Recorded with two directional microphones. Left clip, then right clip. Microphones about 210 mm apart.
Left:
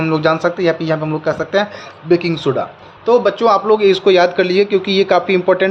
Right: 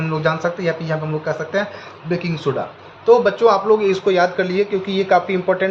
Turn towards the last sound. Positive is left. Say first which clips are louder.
# left 4 dB
turn(degrees=55)  # may be behind; listen again after turning